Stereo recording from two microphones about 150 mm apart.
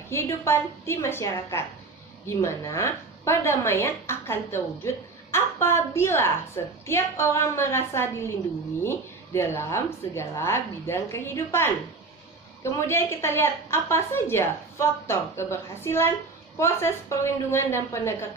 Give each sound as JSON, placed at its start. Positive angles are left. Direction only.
{"t": 0.1, "sound": "a woman's voice", "side_deg": 15}